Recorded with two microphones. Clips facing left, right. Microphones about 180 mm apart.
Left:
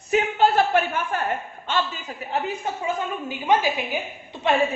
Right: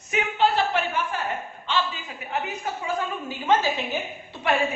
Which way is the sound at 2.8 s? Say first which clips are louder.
Left 1 dB; 15° left (ahead or behind).